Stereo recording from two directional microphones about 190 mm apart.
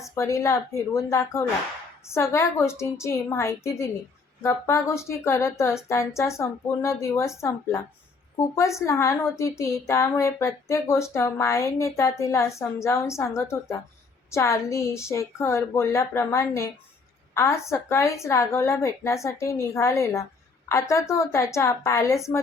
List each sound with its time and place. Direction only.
0.0 s a woman's voice: 15° left (ahead or behind)